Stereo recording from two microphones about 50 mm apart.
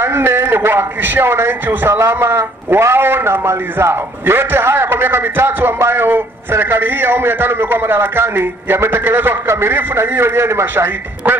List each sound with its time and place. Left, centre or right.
0.0 s a man's voice: right
1.9 s a man's voice: right
2.8 s a man's voice: right